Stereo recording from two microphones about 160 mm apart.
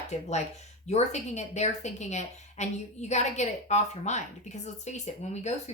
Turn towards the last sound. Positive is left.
turn(degrees=45)  # may be behind; listen again after turning